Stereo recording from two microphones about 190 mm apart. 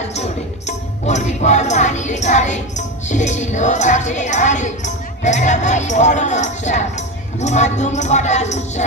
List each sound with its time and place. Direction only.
1.0 s speech: 40° left (ahead or behind)